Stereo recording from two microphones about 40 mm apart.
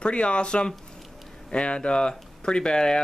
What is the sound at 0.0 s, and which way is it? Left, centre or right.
Speech, left.